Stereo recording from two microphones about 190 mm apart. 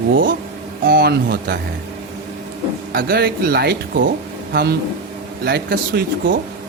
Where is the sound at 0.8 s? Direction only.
60° right (ahead or behind).